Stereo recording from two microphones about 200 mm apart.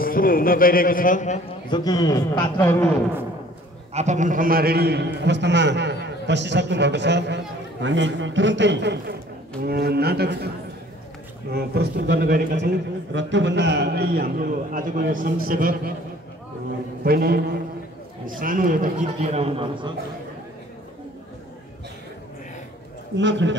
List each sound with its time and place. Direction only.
0.0 s speech: 45° left (ahead or behind)
1.7 s a man's voice: 20° left (ahead or behind)
3.9 s a man's voice: 35° right (ahead or behind); by 10.5 s 55° right (ahead or behind)
11.5 s a man's voice: 50° right (ahead or behind)
13.1 s a man's voice: 65° right (ahead or behind); by 15.9 s 45° right (ahead or behind)
17.0 s a man's voice: 50° right (ahead or behind)
18.4 s a man's voice: 45° right (ahead or behind); by 19.9 s 25° right (ahead or behind)
23.1 s a man's voice: 65° right (ahead or behind)